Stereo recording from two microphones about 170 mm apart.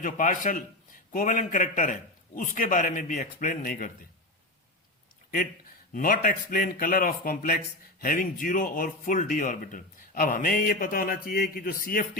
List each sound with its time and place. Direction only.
0.0 s a man's voice: 50° left (ahead or behind)
5.9 s speech: 55° left (ahead or behind)